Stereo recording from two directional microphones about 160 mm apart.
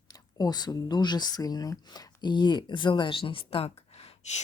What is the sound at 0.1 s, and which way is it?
Speech, 25° left (ahead or behind).